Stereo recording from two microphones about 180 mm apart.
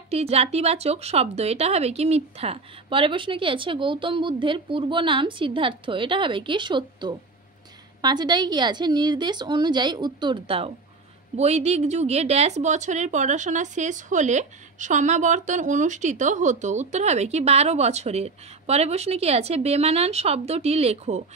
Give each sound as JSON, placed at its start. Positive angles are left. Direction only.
{"t": 0.1, "sound": "a woman's voice", "side_deg": -35}